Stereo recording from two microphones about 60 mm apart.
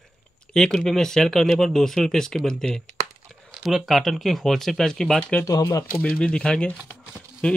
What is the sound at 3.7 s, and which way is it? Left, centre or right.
Speech, centre.